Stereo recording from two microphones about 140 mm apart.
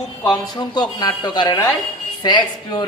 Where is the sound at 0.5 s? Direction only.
30° left (ahead or behind).